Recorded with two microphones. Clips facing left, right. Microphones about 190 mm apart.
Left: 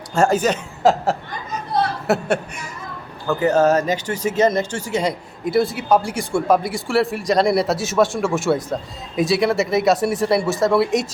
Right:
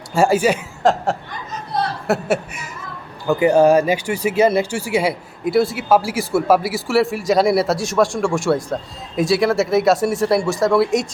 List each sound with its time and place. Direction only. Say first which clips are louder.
0.1 s speech: right 2 dB; 10° right (ahead or behind)
0.8 s speech: left 3 dB; 5° left (ahead or behind)